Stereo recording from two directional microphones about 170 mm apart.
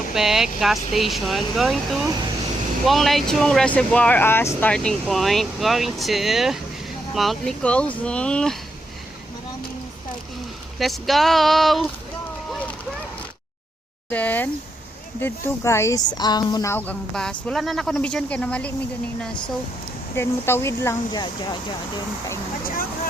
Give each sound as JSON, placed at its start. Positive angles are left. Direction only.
{"t": 0.1, "sound": "speech", "side_deg": 0}
{"t": 10.8, "sound": "speech", "side_deg": 0}
{"t": 12.5, "sound": "vehicle", "side_deg": 10}
{"t": 14.1, "sound": "speech", "side_deg": 10}
{"t": 16.7, "sound": "speech", "side_deg": 10}
{"t": 20.1, "sound": "speech", "side_deg": 15}